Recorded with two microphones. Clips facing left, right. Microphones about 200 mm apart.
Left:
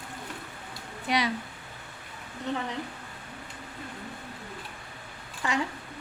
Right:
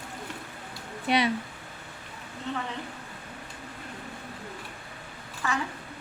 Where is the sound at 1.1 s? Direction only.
25° right (ahead or behind).